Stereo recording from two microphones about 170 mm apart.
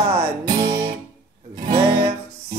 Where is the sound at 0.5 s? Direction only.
70° right (ahead or behind).